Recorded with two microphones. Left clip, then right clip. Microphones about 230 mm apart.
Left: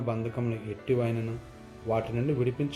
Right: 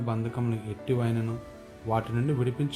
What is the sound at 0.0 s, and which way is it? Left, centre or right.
Speech, right.